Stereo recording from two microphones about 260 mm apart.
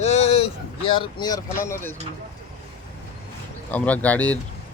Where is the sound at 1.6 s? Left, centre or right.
Centre.